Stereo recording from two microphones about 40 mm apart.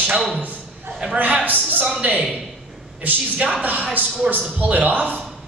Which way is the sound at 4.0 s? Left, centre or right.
Right.